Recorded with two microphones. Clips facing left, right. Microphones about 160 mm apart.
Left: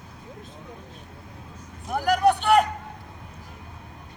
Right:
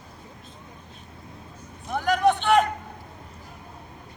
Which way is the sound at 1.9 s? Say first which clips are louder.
Left 1 dB; 5° left (ahead or behind).